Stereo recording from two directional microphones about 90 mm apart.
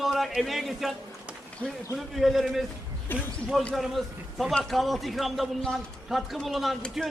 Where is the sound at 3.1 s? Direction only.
25° left (ahead or behind).